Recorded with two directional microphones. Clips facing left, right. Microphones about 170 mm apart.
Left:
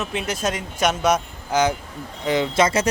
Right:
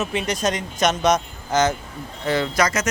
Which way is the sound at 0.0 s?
Centre (ahead or behind).